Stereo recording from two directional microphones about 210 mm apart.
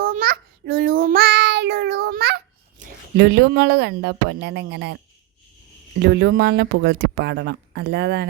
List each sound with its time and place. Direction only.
0.0 s child singing: 45° right (ahead or behind)
6.0 s speech: 50° right (ahead or behind)